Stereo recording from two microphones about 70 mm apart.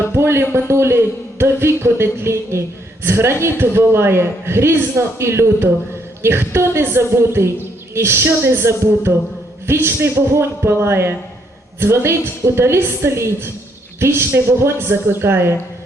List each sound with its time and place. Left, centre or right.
0.1 s a man's voice: right